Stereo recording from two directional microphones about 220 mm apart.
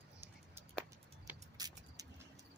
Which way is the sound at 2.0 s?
15° right (ahead or behind).